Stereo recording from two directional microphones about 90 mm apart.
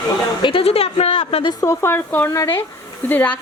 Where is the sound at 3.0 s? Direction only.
20° left (ahead or behind).